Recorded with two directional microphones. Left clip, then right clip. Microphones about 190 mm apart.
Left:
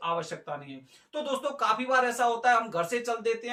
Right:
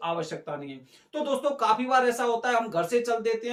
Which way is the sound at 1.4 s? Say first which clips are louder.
Right 3 dB; 15° right (ahead or behind).